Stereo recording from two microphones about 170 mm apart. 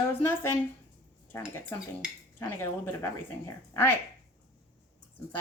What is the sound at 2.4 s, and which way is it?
Speech, 15° left (ahead or behind).